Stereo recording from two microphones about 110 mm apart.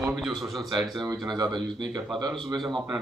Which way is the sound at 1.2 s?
40° right (ahead or behind).